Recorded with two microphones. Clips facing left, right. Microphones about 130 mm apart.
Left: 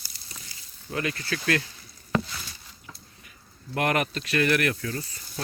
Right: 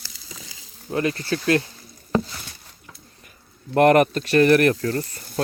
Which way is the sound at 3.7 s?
45° right (ahead or behind).